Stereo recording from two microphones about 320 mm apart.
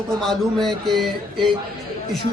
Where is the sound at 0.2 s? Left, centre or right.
Centre.